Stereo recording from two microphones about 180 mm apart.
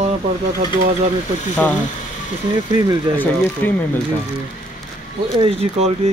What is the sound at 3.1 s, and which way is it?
Speech, 10° left (ahead or behind).